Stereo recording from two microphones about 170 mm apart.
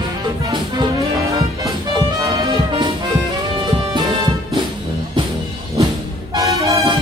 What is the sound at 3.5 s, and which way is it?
Music, 30° right (ahead or behind).